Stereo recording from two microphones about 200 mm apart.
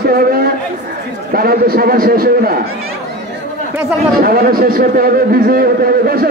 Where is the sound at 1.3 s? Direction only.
45° right (ahead or behind).